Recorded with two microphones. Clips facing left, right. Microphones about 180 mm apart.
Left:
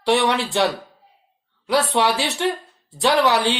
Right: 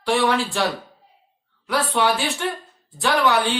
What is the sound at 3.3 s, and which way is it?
Speech, 80° left.